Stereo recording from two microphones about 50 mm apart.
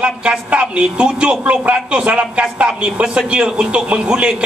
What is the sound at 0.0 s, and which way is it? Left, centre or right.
Speech, right.